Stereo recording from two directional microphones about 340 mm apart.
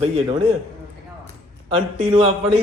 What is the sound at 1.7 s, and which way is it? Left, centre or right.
Speech, centre.